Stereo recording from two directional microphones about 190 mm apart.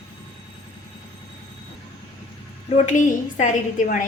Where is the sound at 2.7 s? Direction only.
40° left (ahead or behind).